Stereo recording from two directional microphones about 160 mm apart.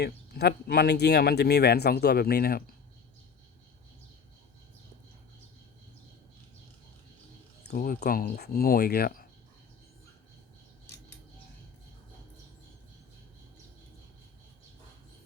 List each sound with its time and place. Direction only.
0.0 s speech: 90° left; by 2.6 s 70° left (ahead or behind)
7.6 s speech: 70° left (ahead or behind)